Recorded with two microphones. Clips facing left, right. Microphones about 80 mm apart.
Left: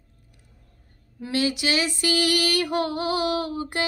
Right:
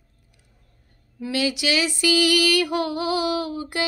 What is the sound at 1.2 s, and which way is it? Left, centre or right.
Female singing, left.